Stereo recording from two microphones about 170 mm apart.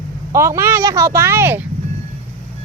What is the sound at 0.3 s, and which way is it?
Speech, 15° right (ahead or behind).